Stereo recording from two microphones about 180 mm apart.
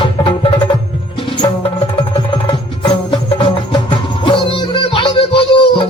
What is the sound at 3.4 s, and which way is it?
Music, 30° left (ahead or behind).